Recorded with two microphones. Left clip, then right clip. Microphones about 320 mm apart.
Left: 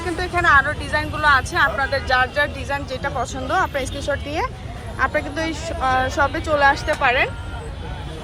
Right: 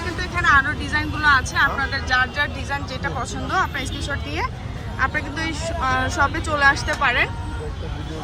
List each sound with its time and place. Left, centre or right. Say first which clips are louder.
0.2 s speech: left 2 dB; centre